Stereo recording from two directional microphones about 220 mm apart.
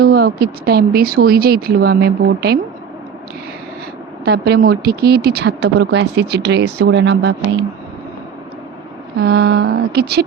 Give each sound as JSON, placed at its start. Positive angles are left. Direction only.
{"t": 0.0, "sound": "speech", "side_deg": -45}
{"t": 4.3, "sound": "speech", "side_deg": -45}
{"t": 9.2, "sound": "speech", "side_deg": -50}